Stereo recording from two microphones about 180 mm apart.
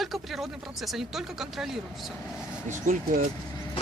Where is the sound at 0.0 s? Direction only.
Centre (ahead or behind).